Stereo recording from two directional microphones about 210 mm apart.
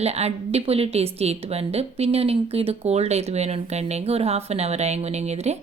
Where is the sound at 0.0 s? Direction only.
30° right (ahead or behind).